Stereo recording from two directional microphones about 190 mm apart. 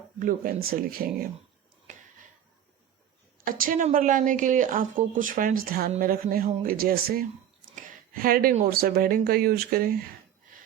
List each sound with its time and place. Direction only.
0.2 s a woman's voice: 45° right (ahead or behind)
3.4 s a woman's voice: 45° right (ahead or behind)
7.9 s a sound: 50° right (ahead or behind)
8.6 s a woman's voice: 50° right (ahead or behind)